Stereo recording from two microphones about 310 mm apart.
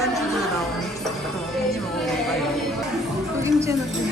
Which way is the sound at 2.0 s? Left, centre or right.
Centre.